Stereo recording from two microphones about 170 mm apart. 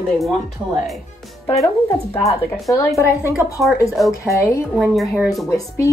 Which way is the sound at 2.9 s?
15° left (ahead or behind).